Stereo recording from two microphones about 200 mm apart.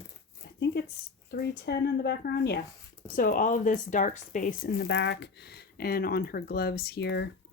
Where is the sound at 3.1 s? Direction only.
45° left (ahead or behind).